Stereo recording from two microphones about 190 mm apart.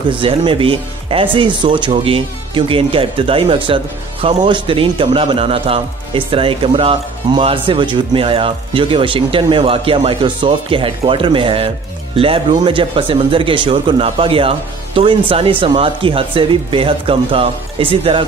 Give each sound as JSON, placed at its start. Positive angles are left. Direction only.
{"t": 0.1, "sound": "speech", "side_deg": -25}